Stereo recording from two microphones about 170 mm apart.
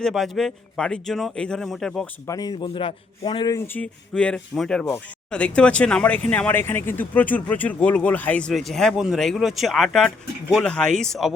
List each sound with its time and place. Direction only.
0.0 s speech: centre (ahead or behind)
2.2 s a man's voice: 20° left (ahead or behind)
3.7 s speech: 10° left (ahead or behind)